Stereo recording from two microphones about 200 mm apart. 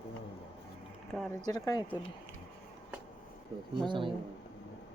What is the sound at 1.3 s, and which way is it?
Speech, 20° left (ahead or behind).